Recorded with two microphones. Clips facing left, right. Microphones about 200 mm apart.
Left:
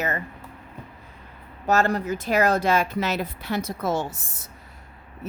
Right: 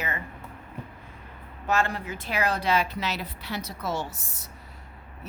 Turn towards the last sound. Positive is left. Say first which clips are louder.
# left 8 dB
turn(degrees=45)  # may be behind; listen again after turning